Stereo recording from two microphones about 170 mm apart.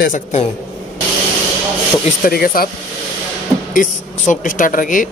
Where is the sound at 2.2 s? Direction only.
60° left (ahead or behind).